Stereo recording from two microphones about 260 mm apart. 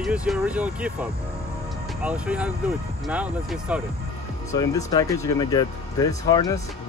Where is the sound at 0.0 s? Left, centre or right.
Centre.